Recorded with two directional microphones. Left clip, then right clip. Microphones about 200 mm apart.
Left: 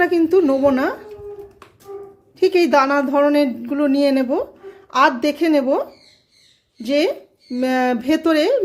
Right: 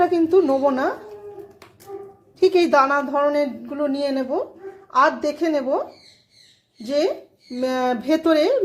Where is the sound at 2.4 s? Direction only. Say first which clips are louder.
Left 1 dB; 15° left (ahead or behind).